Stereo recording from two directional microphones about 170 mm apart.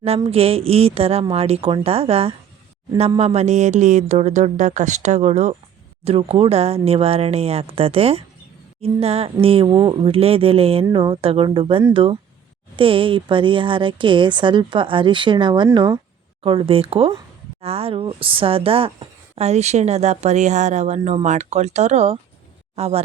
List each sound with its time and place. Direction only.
0.3 s a woman's voice: 35° right (ahead or behind)